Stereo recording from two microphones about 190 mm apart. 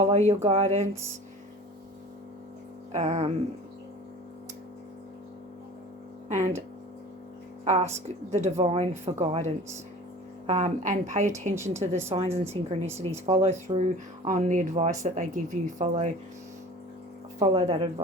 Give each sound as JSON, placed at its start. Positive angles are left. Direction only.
{"t": 0.0, "sound": "speech", "side_deg": -35}
{"t": 2.9, "sound": "speech", "side_deg": -35}
{"t": 6.2, "sound": "speech", "side_deg": -35}
{"t": 7.6, "sound": "speech", "side_deg": -35}
{"t": 17.4, "sound": "speech", "side_deg": -30}